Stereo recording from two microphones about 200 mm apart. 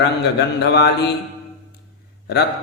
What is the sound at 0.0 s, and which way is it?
Speech, 55° left (ahead or behind).